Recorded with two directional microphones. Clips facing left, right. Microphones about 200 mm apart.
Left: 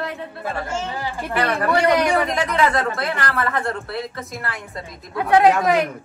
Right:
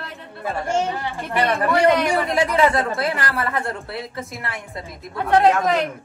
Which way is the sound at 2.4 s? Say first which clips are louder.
Right 1 dB; 30° right (ahead or behind).